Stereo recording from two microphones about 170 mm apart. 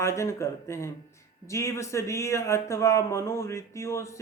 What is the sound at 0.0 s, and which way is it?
Speech, 15° left (ahead or behind).